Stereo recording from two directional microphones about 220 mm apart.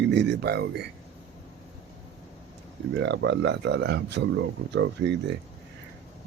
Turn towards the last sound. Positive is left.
turn(degrees=-50)  # may be behind; listen again after turning